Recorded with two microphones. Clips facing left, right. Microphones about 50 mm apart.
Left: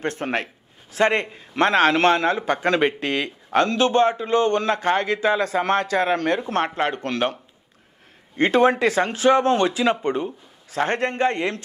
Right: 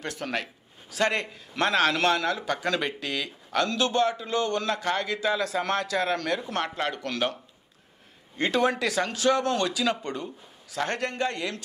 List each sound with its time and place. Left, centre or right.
0.0 s a man's voice: left
8.4 s a man's voice: left